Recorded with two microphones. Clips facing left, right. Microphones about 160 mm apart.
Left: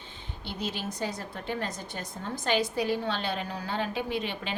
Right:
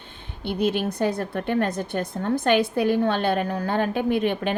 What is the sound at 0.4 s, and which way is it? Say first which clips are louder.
A woman's voice: right 11 dB; 60° right (ahead or behind).